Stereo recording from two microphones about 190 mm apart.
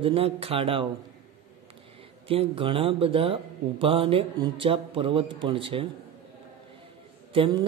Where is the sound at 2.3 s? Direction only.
30° right (ahead or behind).